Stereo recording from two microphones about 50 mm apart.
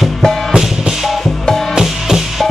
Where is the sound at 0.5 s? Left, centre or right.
Centre.